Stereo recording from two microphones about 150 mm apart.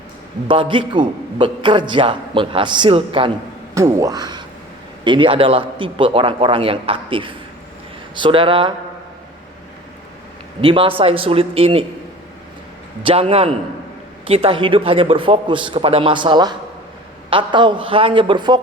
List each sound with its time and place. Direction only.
0.4 s a man's voice: 35° right (ahead or behind)
3.8 s a man's voice: 20° right (ahead or behind); by 8.7 s 35° right (ahead or behind)
10.6 s a man's voice: 35° right (ahead or behind)
13.0 s a man's voice: 40° right (ahead or behind)